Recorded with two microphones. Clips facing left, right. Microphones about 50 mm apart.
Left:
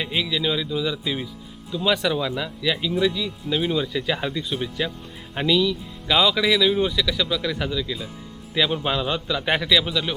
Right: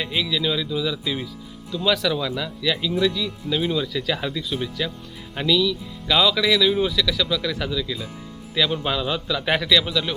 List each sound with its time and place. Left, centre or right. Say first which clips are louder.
0.0 s a man's voice: even; centre